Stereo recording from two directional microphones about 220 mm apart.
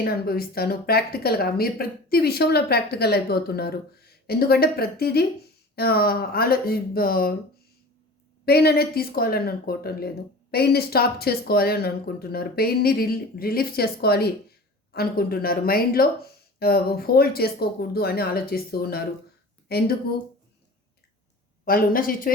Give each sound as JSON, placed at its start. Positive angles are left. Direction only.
{"t": 0.0, "sound": "a woman's voice", "side_deg": 45}
{"t": 8.4, "sound": "a woman's voice", "side_deg": 45}
{"t": 21.6, "sound": "a woman's voice", "side_deg": 40}